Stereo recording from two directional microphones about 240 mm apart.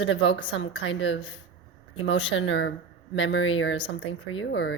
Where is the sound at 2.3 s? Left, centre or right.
Left.